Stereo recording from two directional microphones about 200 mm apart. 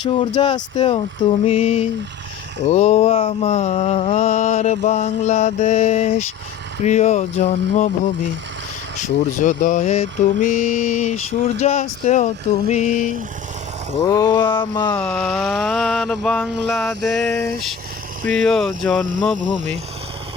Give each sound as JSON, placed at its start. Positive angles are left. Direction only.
{"t": 0.0, "sound": "speech", "side_deg": 25}
{"t": 1.5, "sound": "mantra", "side_deg": 30}
{"t": 9.0, "sound": "mantra", "side_deg": 40}
{"t": 14.1, "sound": "speech", "side_deg": 20}
{"t": 14.9, "sound": "a sound", "side_deg": 5}
{"t": 19.4, "sound": "speech", "side_deg": -35}